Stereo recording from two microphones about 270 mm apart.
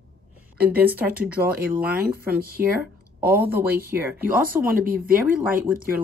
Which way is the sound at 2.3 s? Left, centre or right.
Right.